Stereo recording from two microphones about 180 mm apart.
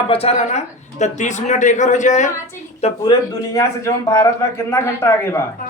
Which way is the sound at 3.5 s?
20° left (ahead or behind).